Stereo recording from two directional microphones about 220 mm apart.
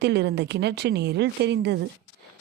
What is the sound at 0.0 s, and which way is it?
Speech, 50° right (ahead or behind).